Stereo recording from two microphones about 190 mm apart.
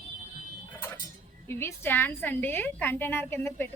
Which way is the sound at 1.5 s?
15° left (ahead or behind).